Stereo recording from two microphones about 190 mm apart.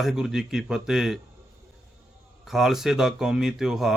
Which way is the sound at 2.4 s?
Centre (ahead or behind).